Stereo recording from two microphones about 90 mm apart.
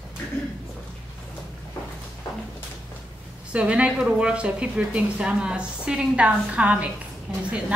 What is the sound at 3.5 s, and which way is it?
A woman's voice, 15° right (ahead or behind).